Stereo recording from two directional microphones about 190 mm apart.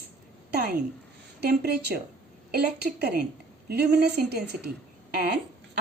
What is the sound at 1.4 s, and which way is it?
A woman's voice, 60° right (ahead or behind).